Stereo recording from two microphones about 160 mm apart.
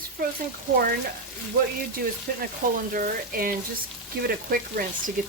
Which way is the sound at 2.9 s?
60° right (ahead or behind).